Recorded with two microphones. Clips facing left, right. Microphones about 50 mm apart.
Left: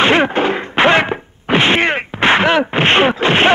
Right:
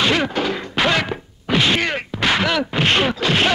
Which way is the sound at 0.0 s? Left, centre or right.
Left.